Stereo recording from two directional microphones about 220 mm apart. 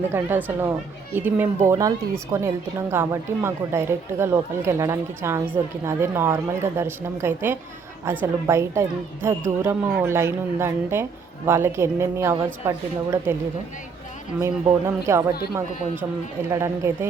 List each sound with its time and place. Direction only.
0.1 s speech: 10° right (ahead or behind)
14.4 s speech: 10° right (ahead or behind)